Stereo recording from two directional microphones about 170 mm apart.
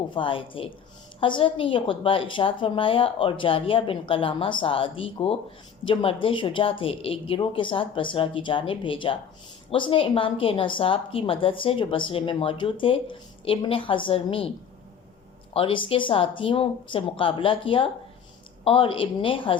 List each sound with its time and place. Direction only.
0.1 s a woman's voice: 30° left (ahead or behind)
15.5 s a woman's voice: 30° left (ahead or behind)